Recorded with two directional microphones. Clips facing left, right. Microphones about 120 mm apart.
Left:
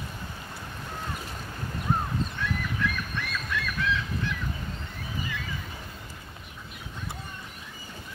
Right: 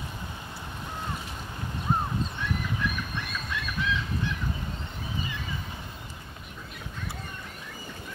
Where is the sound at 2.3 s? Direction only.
20° right (ahead or behind).